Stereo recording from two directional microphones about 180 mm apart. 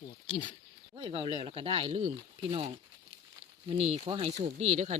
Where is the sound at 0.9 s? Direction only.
30° right (ahead or behind).